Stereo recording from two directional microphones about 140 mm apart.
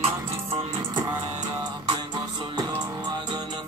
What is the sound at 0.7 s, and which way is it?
Music, 25° right (ahead or behind).